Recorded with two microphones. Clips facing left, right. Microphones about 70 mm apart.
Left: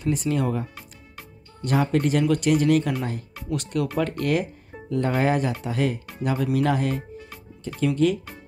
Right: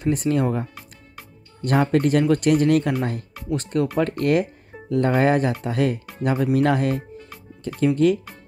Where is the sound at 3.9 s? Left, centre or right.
Right.